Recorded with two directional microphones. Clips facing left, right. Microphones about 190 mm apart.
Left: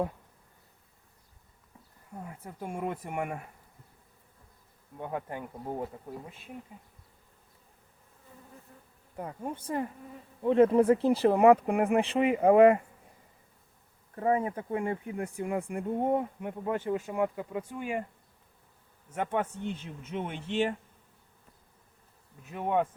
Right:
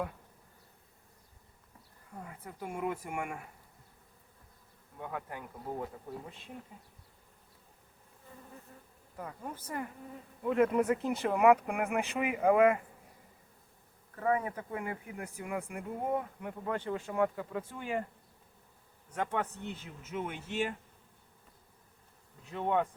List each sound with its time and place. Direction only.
2.2 s speech: 30° left (ahead or behind)
4.9 s speech: 25° left (ahead or behind)
9.1 s speech: 25° left (ahead or behind)
14.2 s speech: 25° left (ahead or behind)
19.1 s speech: 20° left (ahead or behind)
22.5 s speech: 10° left (ahead or behind)